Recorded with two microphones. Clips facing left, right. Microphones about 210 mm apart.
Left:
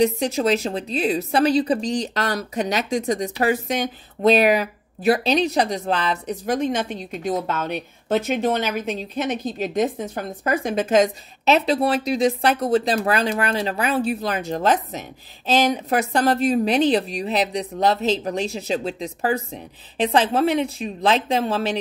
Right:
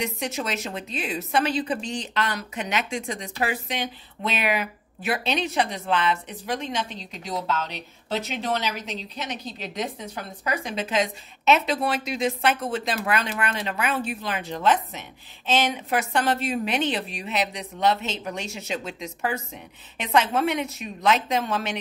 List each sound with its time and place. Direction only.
0.0 s a woman's voice: 35° left (ahead or behind)